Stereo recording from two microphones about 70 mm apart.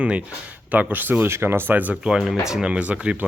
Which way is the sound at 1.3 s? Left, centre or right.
Right.